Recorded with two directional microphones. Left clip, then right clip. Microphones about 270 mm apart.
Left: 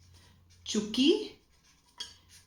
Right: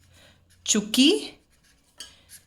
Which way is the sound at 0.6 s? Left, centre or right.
Right.